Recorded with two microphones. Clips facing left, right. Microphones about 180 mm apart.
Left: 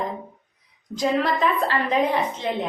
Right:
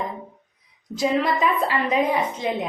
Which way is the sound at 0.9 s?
10° right (ahead or behind).